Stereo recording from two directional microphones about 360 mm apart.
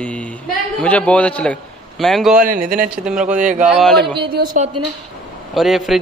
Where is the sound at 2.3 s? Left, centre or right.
Right.